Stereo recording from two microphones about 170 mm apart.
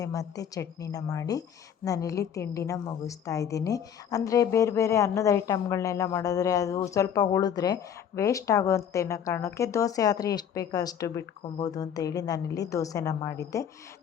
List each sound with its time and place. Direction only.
0.0 s a woman's voice: 20° left (ahead or behind)